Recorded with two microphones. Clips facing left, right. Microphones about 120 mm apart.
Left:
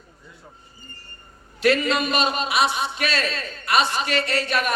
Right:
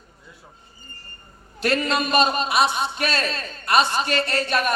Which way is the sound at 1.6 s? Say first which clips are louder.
Left 2 dB; 40° right (ahead or behind).